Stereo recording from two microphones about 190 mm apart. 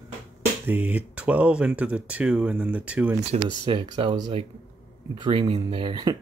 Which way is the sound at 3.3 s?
35° right (ahead or behind).